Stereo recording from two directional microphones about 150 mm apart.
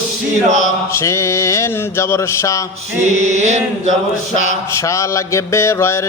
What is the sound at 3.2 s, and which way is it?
Chant, 50° right (ahead or behind).